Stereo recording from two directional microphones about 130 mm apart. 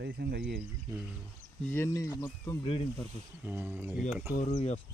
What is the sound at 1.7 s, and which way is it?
Speech, 20° left (ahead or behind).